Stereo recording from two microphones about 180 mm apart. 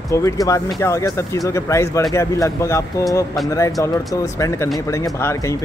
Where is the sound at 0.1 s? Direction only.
15° left (ahead or behind).